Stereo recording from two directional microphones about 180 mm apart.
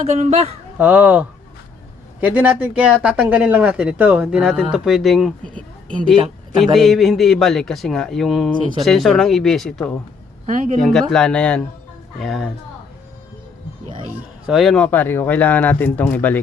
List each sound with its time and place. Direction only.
0.0 s speech: 40° right (ahead or behind)
0.8 s speech: 10° right (ahead or behind)
6.1 s speech: 25° right (ahead or behind)
6.7 s speech: centre (ahead or behind)
10.4 s speech: 45° right (ahead or behind)
10.8 s speech: centre (ahead or behind)
14.4 s speech: centre (ahead or behind)